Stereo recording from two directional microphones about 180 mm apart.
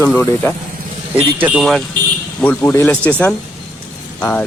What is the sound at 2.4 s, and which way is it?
Speech, 10° left (ahead or behind).